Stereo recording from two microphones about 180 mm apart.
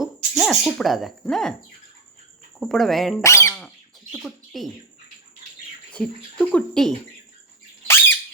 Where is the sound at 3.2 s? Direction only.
15° left (ahead or behind).